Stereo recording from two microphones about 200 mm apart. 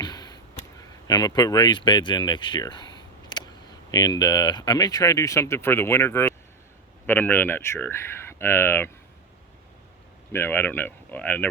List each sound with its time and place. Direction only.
0.0 s a sound: 20° left (ahead or behind)
1.0 s speech: 20° left (ahead or behind)
10.3 s speech: 10° left (ahead or behind)